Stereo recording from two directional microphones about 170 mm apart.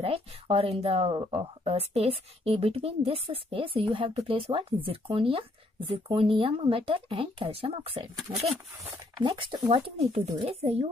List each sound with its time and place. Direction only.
0.0 s speech: 35° right (ahead or behind)
9.2 s speech: 25° right (ahead or behind)